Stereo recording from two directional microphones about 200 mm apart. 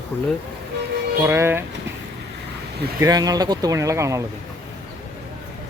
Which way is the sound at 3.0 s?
20° right (ahead or behind).